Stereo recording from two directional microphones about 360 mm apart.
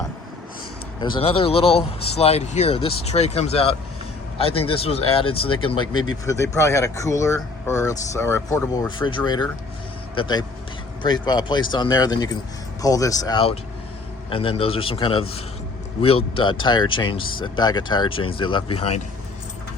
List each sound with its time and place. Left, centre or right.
1.1 s speech: centre